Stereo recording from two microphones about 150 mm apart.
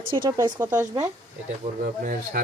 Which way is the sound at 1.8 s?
70° right (ahead or behind).